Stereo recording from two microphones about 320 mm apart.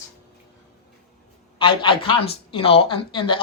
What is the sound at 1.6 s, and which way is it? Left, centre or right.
Speech, centre.